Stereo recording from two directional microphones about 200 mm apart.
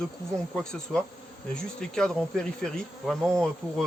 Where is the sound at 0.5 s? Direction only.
5° left (ahead or behind).